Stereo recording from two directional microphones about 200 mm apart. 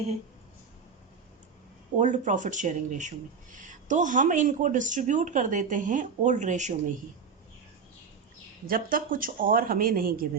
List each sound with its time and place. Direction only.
2.0 s speech: 35° right (ahead or behind)
8.6 s speech: 45° right (ahead or behind)